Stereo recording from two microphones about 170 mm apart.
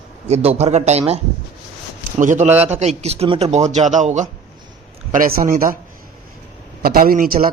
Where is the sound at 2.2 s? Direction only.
50° right (ahead or behind).